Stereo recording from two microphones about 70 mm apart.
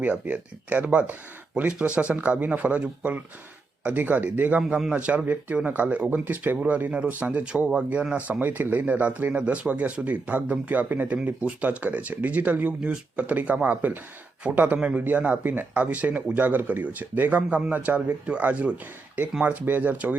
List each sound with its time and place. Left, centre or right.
0.0 s speech: right